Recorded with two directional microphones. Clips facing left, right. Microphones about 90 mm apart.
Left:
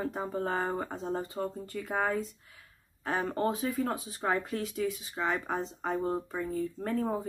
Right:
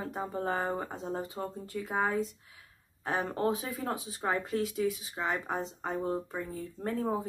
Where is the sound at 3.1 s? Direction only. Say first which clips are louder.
Even; centre (ahead or behind); by 5.0 s 20° right (ahead or behind).